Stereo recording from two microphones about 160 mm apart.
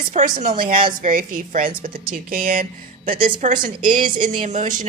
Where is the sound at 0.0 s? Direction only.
55° right (ahead or behind).